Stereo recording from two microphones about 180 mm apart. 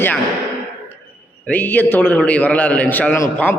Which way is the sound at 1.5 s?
10° left (ahead or behind).